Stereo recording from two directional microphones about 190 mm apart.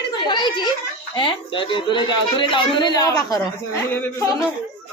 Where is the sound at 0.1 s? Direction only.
25° left (ahead or behind).